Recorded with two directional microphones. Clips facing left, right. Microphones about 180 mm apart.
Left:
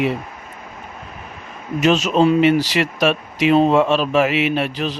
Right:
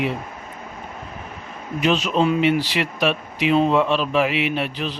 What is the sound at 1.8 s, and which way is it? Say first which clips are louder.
Speech: left 4 dB; 45° left (ahead or behind).